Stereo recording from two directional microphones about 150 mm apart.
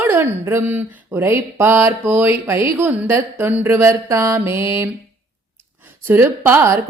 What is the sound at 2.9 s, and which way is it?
Mantra, 15° right (ahead or behind).